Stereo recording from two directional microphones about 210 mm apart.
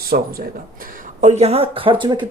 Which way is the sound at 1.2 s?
35° right (ahead or behind).